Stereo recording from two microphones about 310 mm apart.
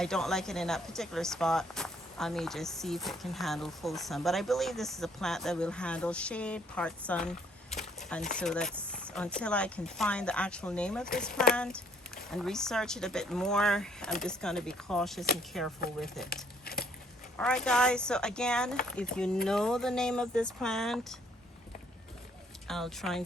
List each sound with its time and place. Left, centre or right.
0.0 s speech: centre
16.3 s crumpling: left
17.3 s speech: centre
22.6 s speech: centre